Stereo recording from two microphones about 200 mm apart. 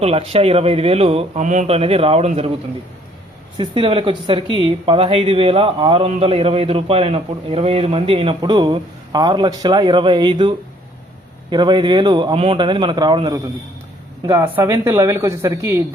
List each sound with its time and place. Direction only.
0.0 s speech: 30° right (ahead or behind)
3.6 s speech: 25° right (ahead or behind)
11.5 s speech: 20° right (ahead or behind)